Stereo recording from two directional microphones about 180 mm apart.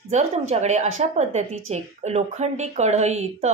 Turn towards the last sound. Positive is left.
turn(degrees=-40)  # may be behind; listen again after turning